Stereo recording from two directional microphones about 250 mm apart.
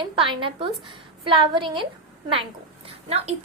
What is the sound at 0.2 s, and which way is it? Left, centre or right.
A woman's voice, right.